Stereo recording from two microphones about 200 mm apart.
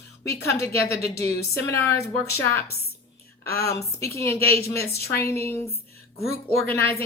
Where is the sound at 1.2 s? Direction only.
10° left (ahead or behind).